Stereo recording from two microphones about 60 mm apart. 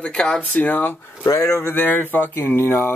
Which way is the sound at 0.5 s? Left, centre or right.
Left.